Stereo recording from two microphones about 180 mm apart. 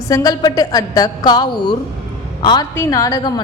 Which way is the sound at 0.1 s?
20° left (ahead or behind).